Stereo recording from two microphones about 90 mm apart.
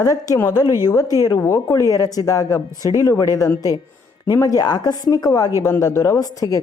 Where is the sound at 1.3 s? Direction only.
30° left (ahead or behind).